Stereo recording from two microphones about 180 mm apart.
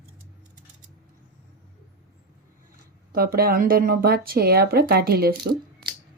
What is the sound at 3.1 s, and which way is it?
Speech, 55° right (ahead or behind).